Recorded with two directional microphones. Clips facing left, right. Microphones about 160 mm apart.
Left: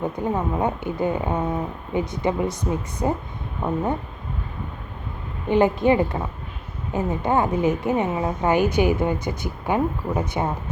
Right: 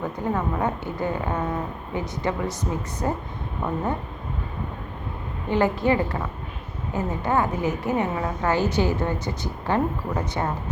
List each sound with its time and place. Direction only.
0.0 s a woman's voice: 15° left (ahead or behind)
5.5 s a woman's voice: 20° left (ahead or behind)